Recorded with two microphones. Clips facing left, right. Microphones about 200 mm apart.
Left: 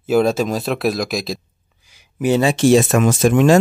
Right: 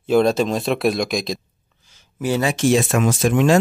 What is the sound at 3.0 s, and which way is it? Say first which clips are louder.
Speech: left 3 dB; 50° left (ahead or behind).